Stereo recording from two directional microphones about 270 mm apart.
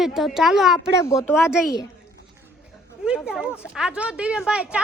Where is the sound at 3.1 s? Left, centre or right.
Centre.